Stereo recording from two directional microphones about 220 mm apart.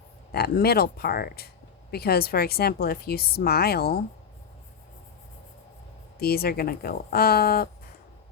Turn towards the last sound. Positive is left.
turn(degrees=45)  # may be behind; listen again after turning